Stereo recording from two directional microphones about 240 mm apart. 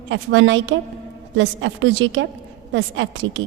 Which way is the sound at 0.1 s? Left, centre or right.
Right.